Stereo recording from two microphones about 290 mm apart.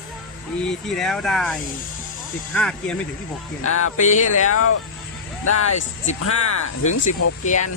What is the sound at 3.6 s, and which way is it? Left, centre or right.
Speech, left.